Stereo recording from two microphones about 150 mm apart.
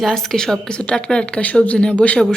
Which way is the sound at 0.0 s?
Centre (ahead or behind).